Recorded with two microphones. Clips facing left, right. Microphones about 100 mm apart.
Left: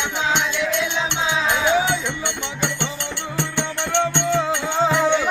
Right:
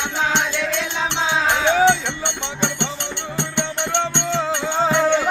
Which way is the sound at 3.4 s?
20° right (ahead or behind).